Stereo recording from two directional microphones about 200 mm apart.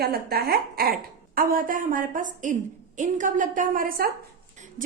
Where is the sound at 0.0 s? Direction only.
50° right (ahead or behind).